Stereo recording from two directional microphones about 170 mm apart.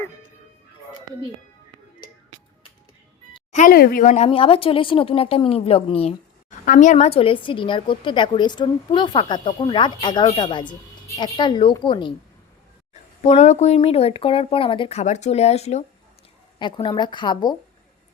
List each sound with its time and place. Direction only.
3.5 s speech: 55° left (ahead or behind); by 6.1 s 35° left (ahead or behind)
6.7 s a woman's voice: 50° left (ahead or behind); by 12.1 s 30° left (ahead or behind)
12.9 s speech: 40° left (ahead or behind)
16.6 s a woman's voice: 30° left (ahead or behind)